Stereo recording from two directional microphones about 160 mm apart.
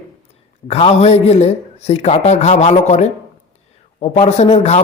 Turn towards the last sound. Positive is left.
turn(degrees=40)  # may be behind; listen again after turning